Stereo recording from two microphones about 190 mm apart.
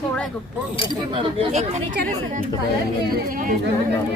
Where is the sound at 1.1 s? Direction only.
30° right (ahead or behind).